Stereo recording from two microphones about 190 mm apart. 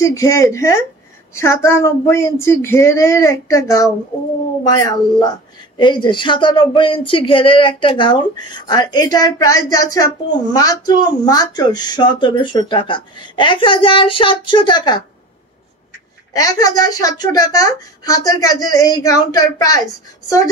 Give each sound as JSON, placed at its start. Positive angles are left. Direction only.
{"t": 0.0, "sound": "speech", "side_deg": 15}
{"t": 16.3, "sound": "speech", "side_deg": 20}